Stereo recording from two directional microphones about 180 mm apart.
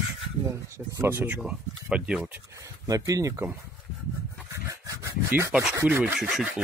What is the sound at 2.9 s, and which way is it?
Speech, 20° right (ahead or behind).